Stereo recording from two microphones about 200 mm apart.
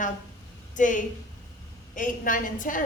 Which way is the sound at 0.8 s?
40° left (ahead or behind).